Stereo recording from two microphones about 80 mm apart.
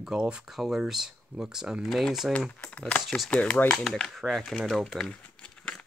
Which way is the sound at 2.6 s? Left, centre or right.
Centre.